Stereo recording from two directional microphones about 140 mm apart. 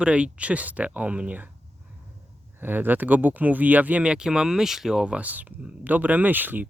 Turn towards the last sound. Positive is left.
turn(degrees=-15)  # may be behind; listen again after turning